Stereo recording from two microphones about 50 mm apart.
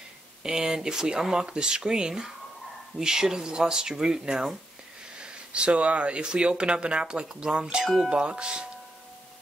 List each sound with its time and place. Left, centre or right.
0.4 s speech: centre